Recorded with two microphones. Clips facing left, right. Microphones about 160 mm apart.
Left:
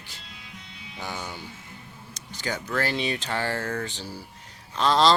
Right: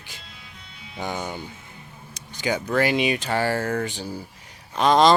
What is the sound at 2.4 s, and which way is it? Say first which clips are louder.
Speech: right 6 dB; 15° right (ahead or behind).